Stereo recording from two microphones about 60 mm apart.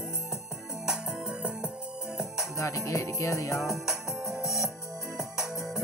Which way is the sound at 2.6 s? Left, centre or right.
Left.